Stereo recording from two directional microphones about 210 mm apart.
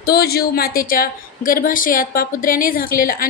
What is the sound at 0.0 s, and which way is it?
A woman's voice, 45° left (ahead or behind).